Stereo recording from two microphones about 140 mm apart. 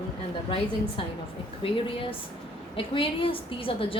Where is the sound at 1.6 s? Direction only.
40° left (ahead or behind).